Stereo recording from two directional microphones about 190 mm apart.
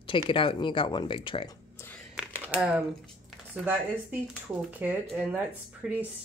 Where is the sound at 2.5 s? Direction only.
5° right (ahead or behind).